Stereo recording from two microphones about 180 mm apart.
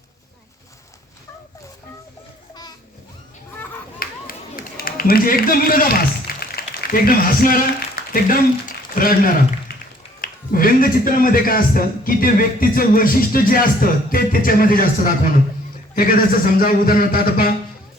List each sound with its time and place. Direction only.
4.0 s run: 55° left (ahead or behind)
10.2 s speech: 50° left (ahead or behind)